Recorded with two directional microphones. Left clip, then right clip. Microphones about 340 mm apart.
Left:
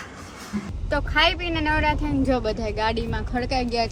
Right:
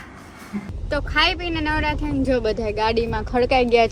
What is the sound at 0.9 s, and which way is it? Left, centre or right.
Speech, centre.